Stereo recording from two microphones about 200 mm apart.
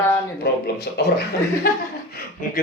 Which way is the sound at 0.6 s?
55° left (ahead or behind).